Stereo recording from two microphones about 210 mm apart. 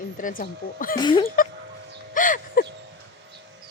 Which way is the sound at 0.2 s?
40° left (ahead or behind).